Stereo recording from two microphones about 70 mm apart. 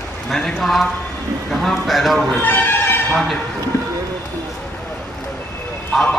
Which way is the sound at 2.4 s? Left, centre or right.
Left.